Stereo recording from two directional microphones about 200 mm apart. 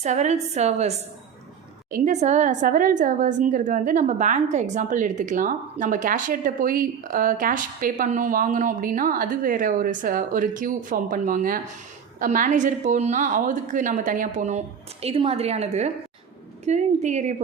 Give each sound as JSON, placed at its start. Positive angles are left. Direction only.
{"t": 0.0, "sound": "a woman's voice", "side_deg": -35}